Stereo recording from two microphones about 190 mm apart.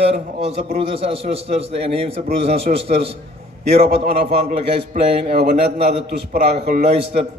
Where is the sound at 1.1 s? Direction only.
30° right (ahead or behind).